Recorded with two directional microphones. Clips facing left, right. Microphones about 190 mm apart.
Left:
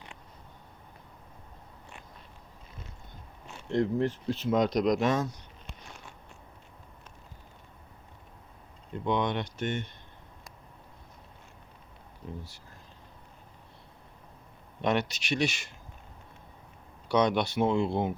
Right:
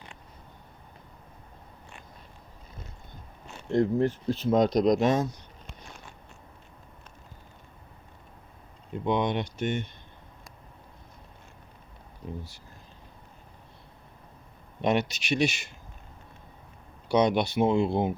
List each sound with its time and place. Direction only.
3.7 s speech: 45° right (ahead or behind); by 5.3 s 25° right (ahead or behind)
9.0 s speech: 15° right (ahead or behind)
14.8 s speech: 10° right (ahead or behind)
17.1 s speech: 10° right (ahead or behind)